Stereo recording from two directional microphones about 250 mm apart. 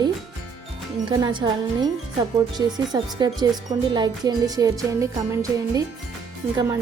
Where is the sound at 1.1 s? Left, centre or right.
Centre.